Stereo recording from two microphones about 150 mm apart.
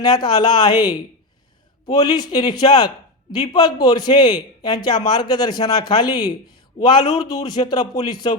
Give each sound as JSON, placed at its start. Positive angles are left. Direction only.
{"t": 0.0, "sound": "a man's voice", "side_deg": 30}